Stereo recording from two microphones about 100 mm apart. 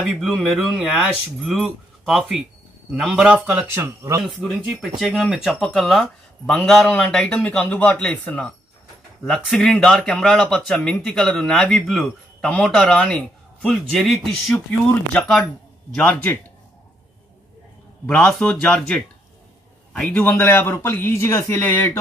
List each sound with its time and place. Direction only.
0.2 s speech: 5° left (ahead or behind); by 3.8 s 15° right (ahead or behind)
4.4 s speech: 10° left (ahead or behind)
4.8 s speech: centre (ahead or behind)
13.9 s speech: centre (ahead or behind); by 16.3 s 15° left (ahead or behind)
18.0 s a man's voice: 10° left (ahead or behind)